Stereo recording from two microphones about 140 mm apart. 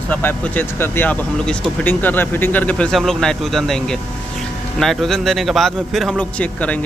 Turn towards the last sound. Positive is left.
turn(degrees=10)  # may be behind; listen again after turning